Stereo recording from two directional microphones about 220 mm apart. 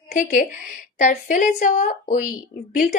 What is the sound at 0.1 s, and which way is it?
Speech, 40° left (ahead or behind).